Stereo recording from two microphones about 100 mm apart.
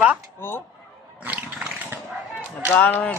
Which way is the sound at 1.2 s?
15° right (ahead or behind).